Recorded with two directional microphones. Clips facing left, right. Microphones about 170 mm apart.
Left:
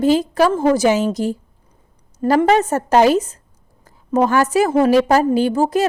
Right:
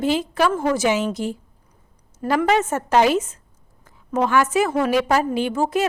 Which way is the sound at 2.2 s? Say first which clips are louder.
Left 5 dB; 35° left (ahead or behind).